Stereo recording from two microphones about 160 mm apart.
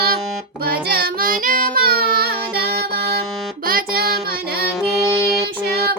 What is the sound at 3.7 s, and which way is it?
Music, 70° right (ahead or behind).